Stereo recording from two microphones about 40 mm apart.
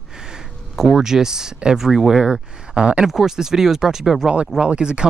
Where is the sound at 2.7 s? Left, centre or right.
Right.